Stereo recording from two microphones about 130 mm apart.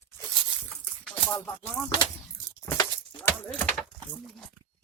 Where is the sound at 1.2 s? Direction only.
15° left (ahead or behind).